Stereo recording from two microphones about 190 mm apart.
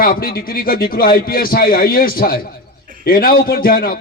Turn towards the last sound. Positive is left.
turn(degrees=50)  # may be behind; listen again after turning